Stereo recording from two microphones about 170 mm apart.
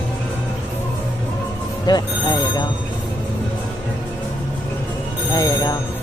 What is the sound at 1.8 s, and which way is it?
Speech, 25° left (ahead or behind).